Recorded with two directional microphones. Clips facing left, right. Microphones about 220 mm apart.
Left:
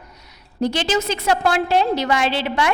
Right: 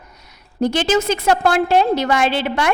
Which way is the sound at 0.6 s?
50° right (ahead or behind).